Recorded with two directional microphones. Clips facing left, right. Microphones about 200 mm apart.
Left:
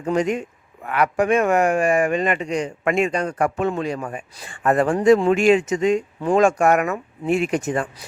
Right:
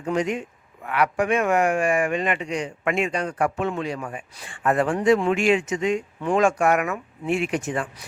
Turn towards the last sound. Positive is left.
turn(degrees=40)  # may be behind; listen again after turning